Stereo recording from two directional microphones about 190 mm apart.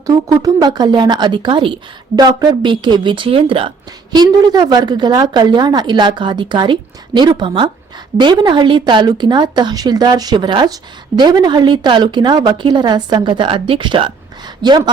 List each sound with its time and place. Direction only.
0.0 s speech: 20° right (ahead or behind)